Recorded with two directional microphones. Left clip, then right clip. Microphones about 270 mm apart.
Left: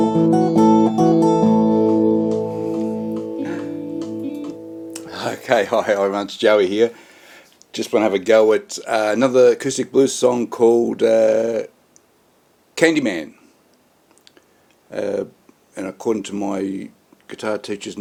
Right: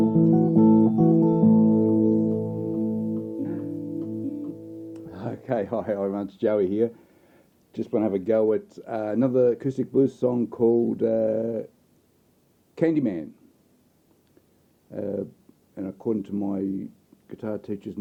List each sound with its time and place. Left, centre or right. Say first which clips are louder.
0.0 s music: left 6 dB; centre
4.9 s speech: left 12 dB; centre
10.7 s speech: left 6 dB; left
10.9 s speech: left 9 dB; centre
12.7 s speech: left 7 dB; centre
14.8 s speech: left 8 dB; centre